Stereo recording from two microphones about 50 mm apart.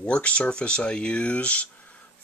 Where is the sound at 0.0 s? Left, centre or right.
Left.